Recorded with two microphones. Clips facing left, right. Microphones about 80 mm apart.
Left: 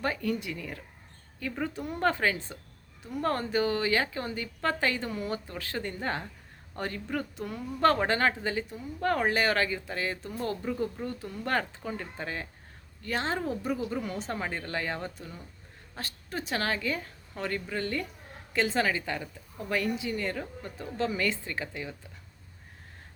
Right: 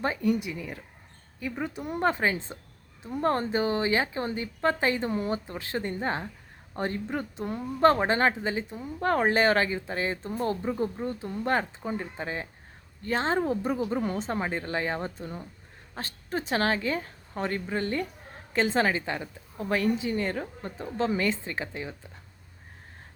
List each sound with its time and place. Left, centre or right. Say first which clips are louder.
0.0 s a woman's voice: right 4 dB; right